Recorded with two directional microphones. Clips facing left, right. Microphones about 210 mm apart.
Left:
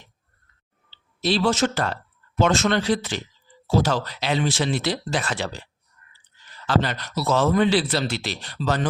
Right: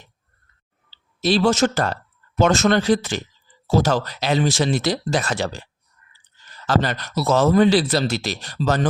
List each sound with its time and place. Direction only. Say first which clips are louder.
1.2 s speech: right 3 dB; 45° right (ahead or behind)
6.7 s speech: right 2 dB; 45° right (ahead or behind)